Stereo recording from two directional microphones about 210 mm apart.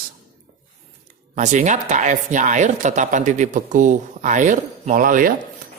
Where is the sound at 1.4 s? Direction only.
35° right (ahead or behind).